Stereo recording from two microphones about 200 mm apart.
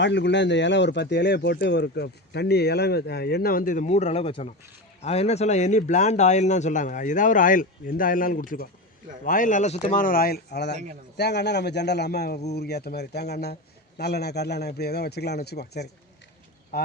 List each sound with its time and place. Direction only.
0.0 s speech: 60° left (ahead or behind)